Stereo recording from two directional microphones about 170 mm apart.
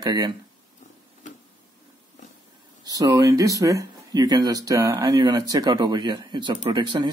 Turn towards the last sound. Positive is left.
turn(degrees=-25)  # may be behind; listen again after turning